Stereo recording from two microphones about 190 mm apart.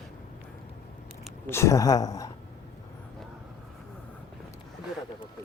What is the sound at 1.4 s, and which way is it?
Speech, 15° left (ahead or behind).